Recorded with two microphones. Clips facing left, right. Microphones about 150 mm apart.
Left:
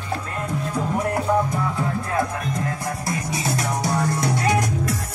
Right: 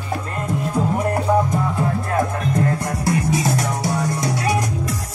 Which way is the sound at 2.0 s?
45° right (ahead or behind).